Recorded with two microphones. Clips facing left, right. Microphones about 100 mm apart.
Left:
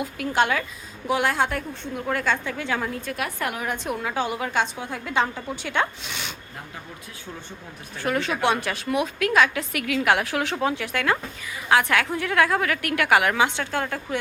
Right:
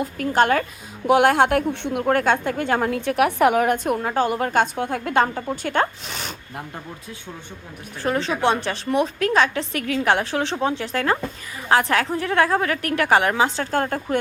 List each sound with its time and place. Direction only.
0.0 s a woman's voice: 45° right (ahead or behind)
1.0 s a woman's voice: 60° right (ahead or behind)
2.9 s a woman's voice: 75° right (ahead or behind); by 3.9 s 60° right (ahead or behind)
3.9 s a woman's voice: 45° right (ahead or behind)
8.0 s a woman's voice: 30° right (ahead or behind)